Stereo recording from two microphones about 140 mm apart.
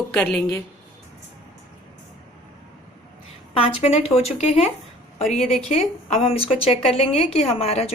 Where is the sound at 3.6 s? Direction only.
45° left (ahead or behind).